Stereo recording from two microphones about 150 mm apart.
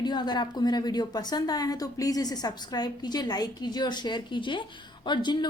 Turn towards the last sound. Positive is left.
turn(degrees=30)  # may be behind; listen again after turning